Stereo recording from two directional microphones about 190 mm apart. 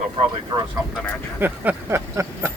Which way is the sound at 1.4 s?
10° right (ahead or behind).